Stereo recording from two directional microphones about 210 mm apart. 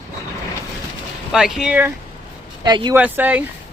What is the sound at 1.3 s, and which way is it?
Speech, centre (ahead or behind).